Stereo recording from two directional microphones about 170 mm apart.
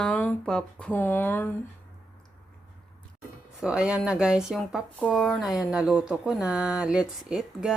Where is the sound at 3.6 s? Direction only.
5° right (ahead or behind).